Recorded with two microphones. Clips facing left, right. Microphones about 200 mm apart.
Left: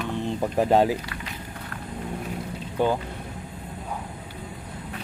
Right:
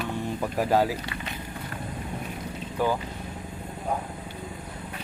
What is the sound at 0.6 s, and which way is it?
Speech, 25° left (ahead or behind).